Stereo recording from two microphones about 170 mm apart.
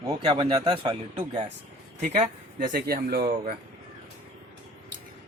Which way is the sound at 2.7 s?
60° right (ahead or behind).